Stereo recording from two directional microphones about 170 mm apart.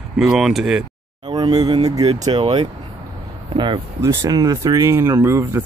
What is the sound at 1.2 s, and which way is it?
Speech, 25° right (ahead or behind).